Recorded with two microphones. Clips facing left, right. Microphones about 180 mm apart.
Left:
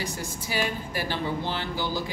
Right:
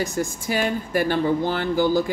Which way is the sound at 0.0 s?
45° right (ahead or behind).